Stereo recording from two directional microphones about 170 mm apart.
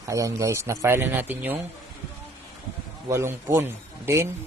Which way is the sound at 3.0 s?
15° right (ahead or behind).